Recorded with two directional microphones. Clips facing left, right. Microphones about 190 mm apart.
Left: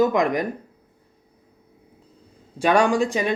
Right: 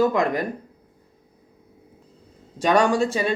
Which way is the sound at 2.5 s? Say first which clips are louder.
Even; 10° left (ahead or behind).